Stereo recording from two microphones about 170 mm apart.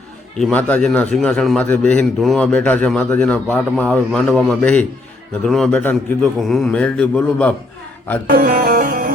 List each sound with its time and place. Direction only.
0.3 s a man's voice: 5° left (ahead or behind)
8.3 s music: 60° right (ahead or behind)